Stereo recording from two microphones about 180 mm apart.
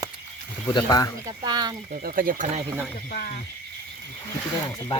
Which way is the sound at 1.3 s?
20° right (ahead or behind).